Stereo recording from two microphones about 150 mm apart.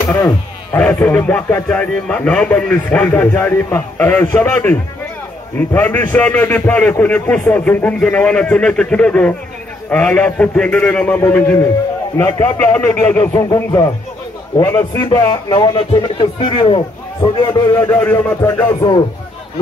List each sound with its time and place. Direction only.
0.7 s a man's voice: 10° left (ahead or behind); by 17.6 s 30° left (ahead or behind)
17.7 s a man's voice: 15° left (ahead or behind)
18.8 s a man's voice: 30° left (ahead or behind)